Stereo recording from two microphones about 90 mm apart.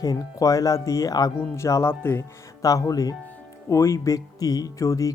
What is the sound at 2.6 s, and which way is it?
Speech, 40° left (ahead or behind).